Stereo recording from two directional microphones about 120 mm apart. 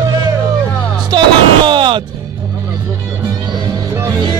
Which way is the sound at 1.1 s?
40° right (ahead or behind).